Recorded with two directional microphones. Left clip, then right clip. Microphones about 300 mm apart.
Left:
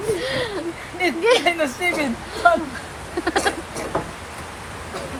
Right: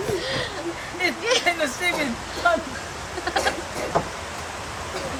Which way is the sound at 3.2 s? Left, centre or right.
Centre.